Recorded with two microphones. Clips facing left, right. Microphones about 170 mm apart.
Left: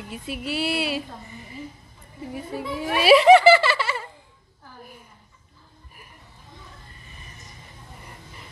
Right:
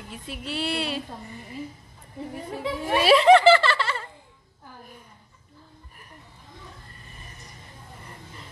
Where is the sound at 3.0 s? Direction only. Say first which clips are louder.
Left 2 dB; 10° left (ahead or behind).